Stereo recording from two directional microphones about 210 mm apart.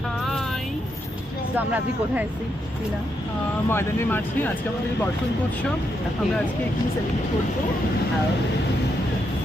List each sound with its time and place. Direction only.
1.5 s speech: 10° right (ahead or behind)
3.7 s speech: 10° left (ahead or behind)